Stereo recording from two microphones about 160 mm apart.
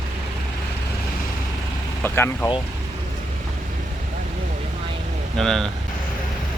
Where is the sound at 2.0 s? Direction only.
15° left (ahead or behind).